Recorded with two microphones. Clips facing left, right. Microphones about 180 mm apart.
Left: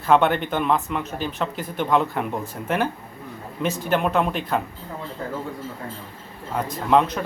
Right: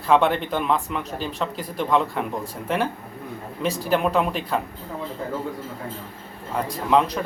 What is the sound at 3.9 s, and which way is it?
Speech, centre (ahead or behind).